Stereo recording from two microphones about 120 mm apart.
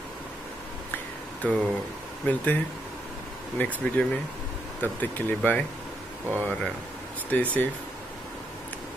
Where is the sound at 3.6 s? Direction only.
15° left (ahead or behind).